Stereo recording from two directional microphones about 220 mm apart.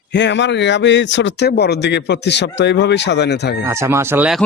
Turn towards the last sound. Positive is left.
turn(degrees=-5)  # may be behind; listen again after turning